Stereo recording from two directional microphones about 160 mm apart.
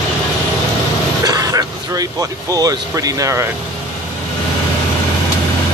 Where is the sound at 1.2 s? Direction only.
20° right (ahead or behind).